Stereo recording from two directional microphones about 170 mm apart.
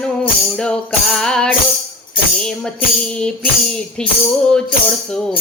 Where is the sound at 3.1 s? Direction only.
5° left (ahead or behind).